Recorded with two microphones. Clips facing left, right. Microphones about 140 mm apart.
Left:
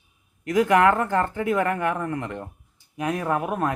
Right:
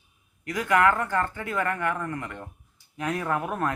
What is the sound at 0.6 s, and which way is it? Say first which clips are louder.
Speech: left 4 dB; 25° left (ahead or behind).